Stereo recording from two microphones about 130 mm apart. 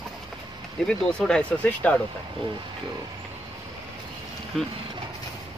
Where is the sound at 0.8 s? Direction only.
5° left (ahead or behind).